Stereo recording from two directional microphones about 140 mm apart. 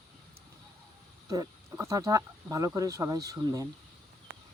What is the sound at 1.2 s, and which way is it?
Speech, 25° right (ahead or behind).